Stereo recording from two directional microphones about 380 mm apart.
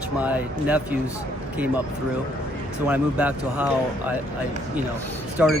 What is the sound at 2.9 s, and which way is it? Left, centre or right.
Speech, centre.